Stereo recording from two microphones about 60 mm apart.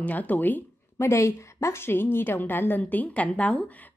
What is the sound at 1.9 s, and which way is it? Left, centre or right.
A woman's voice, left.